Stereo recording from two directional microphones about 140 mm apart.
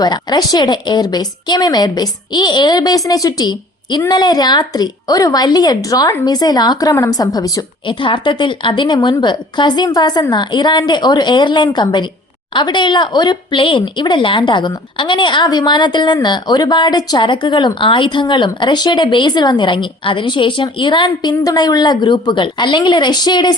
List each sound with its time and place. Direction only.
0.0 s a woman's voice: 30° left (ahead or behind)